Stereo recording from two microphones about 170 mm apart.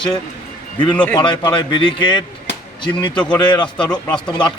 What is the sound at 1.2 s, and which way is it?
A man's voice, 25° left (ahead or behind).